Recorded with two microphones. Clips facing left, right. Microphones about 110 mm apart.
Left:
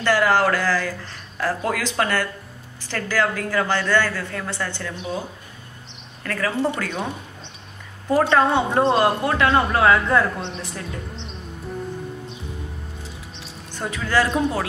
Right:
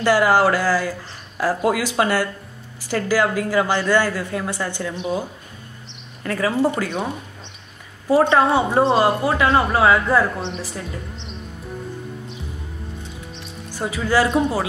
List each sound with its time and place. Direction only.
0.0 s a woman's voice: 10° right (ahead or behind)
6.2 s a woman's voice: 15° right (ahead or behind)
6.5 s speech: 5° right (ahead or behind)
8.1 s speech: 5° right (ahead or behind)
13.4 s speech: 5° right (ahead or behind)